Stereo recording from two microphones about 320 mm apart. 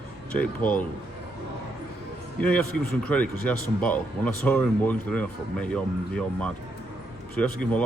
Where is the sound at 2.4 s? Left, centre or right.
Centre.